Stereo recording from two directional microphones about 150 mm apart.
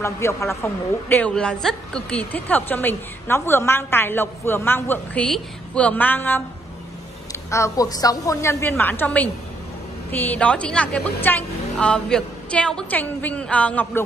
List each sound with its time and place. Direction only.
0.0 s a woman's voice: 20° left (ahead or behind)
7.5 s a woman's voice: 20° left (ahead or behind)